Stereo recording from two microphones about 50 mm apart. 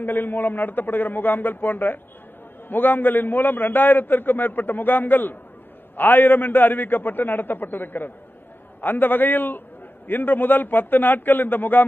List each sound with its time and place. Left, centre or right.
0.0 s a man's voice: left